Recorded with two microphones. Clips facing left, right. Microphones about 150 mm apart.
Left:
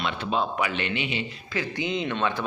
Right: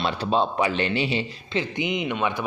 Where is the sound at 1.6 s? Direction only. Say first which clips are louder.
Right 1 dB; 20° right (ahead or behind).